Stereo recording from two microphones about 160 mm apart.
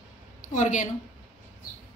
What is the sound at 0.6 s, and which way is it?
Speech, 50° left (ahead or behind).